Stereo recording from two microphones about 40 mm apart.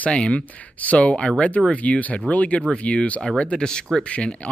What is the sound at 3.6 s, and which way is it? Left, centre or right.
Speech, centre.